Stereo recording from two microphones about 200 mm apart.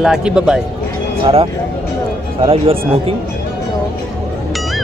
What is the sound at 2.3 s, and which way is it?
Speech, 30° right (ahead or behind).